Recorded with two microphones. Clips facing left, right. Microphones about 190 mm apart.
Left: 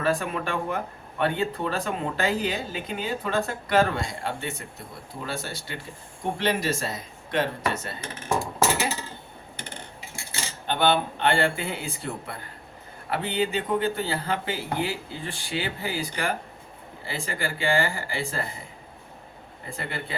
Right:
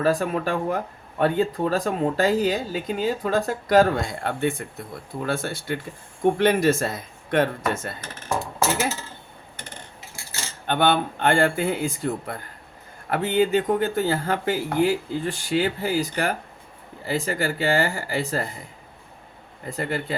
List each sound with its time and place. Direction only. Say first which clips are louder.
0.0 s speech: right 4 dB; 40° right (ahead or behind)
10.7 s speech: right 2 dB; 50° right (ahead or behind)
19.7 s speech: right 7 dB; 45° right (ahead or behind)